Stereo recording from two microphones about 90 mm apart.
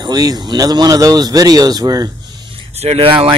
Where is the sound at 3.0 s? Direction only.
90° right.